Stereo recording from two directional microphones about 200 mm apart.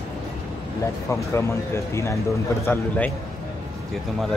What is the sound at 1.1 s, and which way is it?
Speech, 15° left (ahead or behind).